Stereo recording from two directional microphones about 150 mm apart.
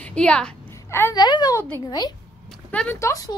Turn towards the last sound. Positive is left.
turn(degrees=20)  # may be behind; listen again after turning